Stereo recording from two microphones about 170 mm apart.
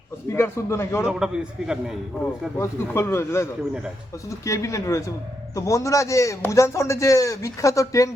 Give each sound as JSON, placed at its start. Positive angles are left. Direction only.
{"t": 0.3, "sound": "speech", "side_deg": 15}
{"t": 1.0, "sound": "a man's voice", "side_deg": -5}
{"t": 2.6, "sound": "a man's voice", "side_deg": 15}